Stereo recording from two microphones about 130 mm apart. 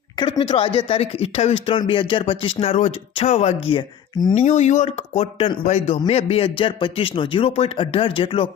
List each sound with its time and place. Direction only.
0.3 s a man's voice: 45° left (ahead or behind)
3.8 s speech: 35° left (ahead or behind)
4.4 s speech: 65° left (ahead or behind); by 5.5 s 45° left (ahead or behind)
5.6 s a man's voice: 55° left (ahead or behind); by 8.4 s 40° left (ahead or behind)